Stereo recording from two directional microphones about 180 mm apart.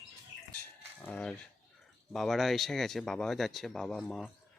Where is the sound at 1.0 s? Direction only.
5° left (ahead or behind).